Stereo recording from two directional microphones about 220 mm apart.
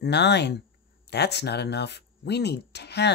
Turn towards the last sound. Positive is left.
turn(degrees=50)  # may be behind; listen again after turning